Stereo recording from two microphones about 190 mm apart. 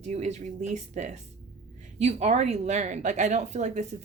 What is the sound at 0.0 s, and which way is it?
A woman's voice, 35° right (ahead or behind).